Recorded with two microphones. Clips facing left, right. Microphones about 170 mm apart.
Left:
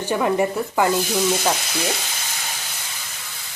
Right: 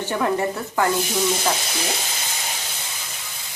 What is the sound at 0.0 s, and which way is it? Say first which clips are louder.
Speech: left 2 dB; 15° left (ahead or behind).